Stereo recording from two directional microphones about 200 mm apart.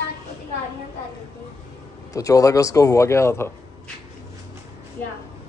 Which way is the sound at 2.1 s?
15° left (ahead or behind).